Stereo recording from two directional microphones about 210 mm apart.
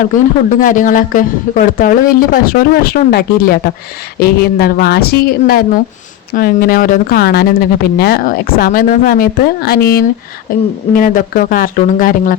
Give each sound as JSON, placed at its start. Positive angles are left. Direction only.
{"t": 0.6, "sound": "speech", "side_deg": 40}